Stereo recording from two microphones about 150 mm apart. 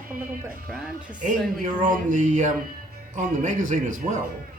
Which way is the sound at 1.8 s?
60° right (ahead or behind).